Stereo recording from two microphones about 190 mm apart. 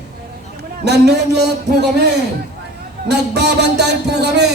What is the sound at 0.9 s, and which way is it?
Speech, 60° right (ahead or behind).